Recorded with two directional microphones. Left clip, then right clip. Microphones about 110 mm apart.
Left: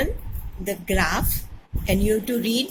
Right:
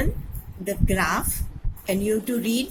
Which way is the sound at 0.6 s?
80° right.